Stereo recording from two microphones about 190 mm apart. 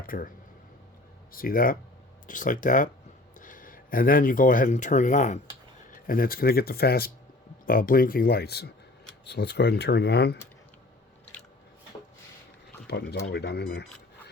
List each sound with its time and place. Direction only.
0.1 s speech: 50° left (ahead or behind)
1.3 s speech: 50° left (ahead or behind)
12.9 s speech: 60° left (ahead or behind)